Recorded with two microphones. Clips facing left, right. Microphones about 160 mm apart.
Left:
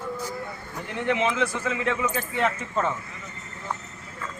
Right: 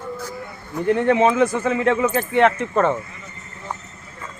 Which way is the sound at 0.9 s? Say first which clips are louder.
Right 7 dB; 50° right (ahead or behind).